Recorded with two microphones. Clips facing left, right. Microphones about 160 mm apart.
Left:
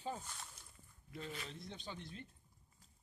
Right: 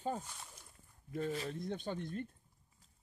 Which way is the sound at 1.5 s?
50° right (ahead or behind).